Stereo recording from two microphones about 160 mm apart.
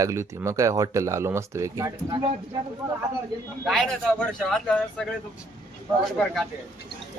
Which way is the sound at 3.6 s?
Centre (ahead or behind).